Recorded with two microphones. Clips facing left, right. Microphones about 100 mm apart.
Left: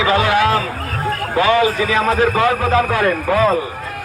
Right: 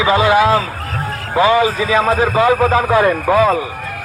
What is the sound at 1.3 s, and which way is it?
A man's voice, 20° right (ahead or behind).